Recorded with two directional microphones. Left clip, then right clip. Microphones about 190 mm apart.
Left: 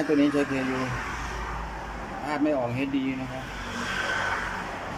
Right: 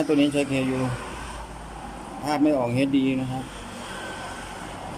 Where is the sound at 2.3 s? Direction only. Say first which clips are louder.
Right 4 dB; 15° right (ahead or behind).